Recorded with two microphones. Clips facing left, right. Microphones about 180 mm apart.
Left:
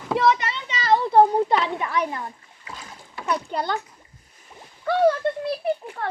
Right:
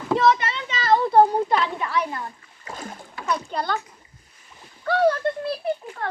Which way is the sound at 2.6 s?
50° right (ahead or behind).